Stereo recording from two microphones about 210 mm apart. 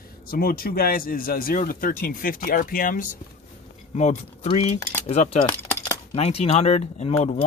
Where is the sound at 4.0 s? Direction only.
30° left (ahead or behind).